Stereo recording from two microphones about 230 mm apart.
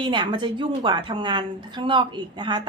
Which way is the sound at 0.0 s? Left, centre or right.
Right.